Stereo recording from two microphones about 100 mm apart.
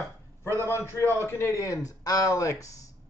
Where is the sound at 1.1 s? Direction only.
25° left (ahead or behind).